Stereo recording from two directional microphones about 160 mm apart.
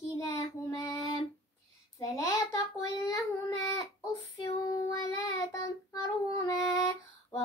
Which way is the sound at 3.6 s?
20° left (ahead or behind).